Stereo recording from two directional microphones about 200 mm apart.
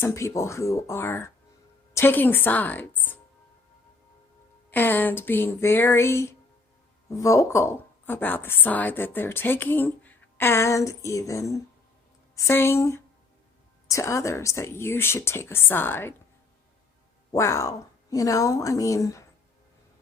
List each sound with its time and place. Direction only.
0.0 s a woman's voice: 15° left (ahead or behind)
4.7 s a woman's voice: 10° left (ahead or behind)
17.3 s a woman's voice: 15° left (ahead or behind)